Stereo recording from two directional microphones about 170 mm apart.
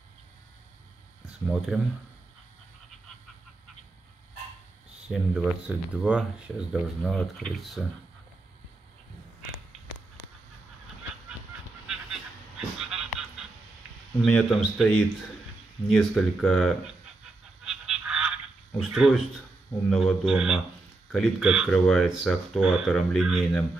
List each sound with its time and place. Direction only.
1.7 s a man's voice: 10° right (ahead or behind)
5.0 s speech: 5° right (ahead or behind)
11.9 s a sound: 5° right (ahead or behind)
14.2 s speech: centre (ahead or behind)
17.6 s honk: 5° right (ahead or behind)
18.8 s speech: centre (ahead or behind)